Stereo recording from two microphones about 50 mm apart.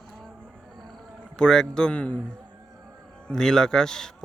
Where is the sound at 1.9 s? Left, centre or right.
Left.